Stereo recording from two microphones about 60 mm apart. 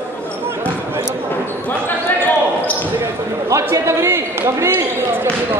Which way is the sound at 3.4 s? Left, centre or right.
Right.